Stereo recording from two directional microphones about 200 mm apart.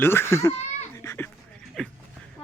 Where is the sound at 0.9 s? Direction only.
10° left (ahead or behind).